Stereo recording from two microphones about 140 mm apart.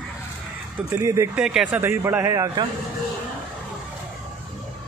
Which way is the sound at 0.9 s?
20° right (ahead or behind).